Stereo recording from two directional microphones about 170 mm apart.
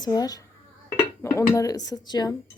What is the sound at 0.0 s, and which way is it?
Speech, 20° left (ahead or behind).